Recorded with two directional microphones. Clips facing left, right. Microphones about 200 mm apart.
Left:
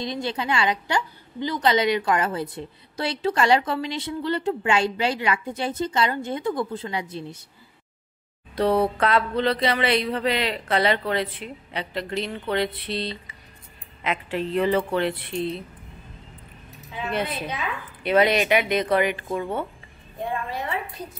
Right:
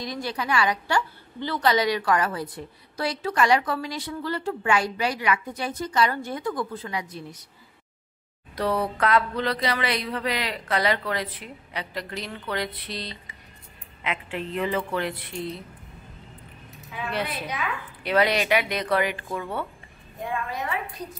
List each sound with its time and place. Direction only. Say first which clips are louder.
0.0 s a woman's voice: left 3 dB; 25° left (ahead or behind)
8.5 s a woman's voice: left 5 dB; 25° left (ahead or behind)
14.0 s speech: left 4 dB; 40° left (ahead or behind)
16.9 s a woman's voice: left 2 dB; 25° left (ahead or behind)